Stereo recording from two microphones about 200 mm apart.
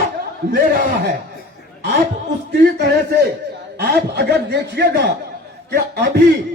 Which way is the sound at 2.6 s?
55° right (ahead or behind).